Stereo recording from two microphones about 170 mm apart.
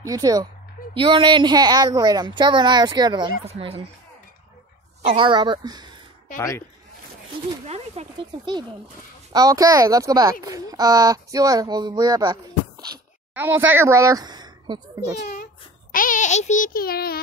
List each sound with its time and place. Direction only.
0.0 s speech: 20° right (ahead or behind)
3.4 s speech: 35° right (ahead or behind)
5.0 s speech: 30° right (ahead or behind)
6.3 s a man's voice: 20° left (ahead or behind)
7.6 s speech: 40° right (ahead or behind)
13.3 s speech: 10° right (ahead or behind)
15.9 s a child's voice: 50° left (ahead or behind)